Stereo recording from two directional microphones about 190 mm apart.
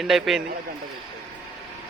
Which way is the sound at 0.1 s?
Centre (ahead or behind).